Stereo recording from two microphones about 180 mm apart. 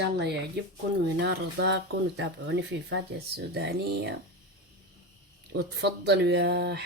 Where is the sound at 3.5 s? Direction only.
65° right (ahead or behind).